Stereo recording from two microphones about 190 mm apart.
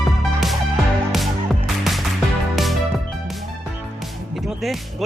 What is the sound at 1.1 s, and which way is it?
Music, centre (ahead or behind).